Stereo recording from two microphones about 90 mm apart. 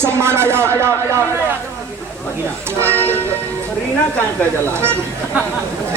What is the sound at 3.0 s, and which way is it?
Music, 20° left (ahead or behind).